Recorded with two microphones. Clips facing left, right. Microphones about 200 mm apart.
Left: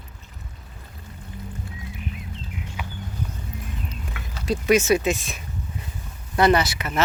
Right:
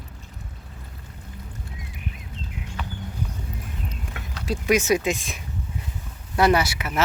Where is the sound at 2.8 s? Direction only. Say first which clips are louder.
Right 2 dB; 10° left (ahead or behind).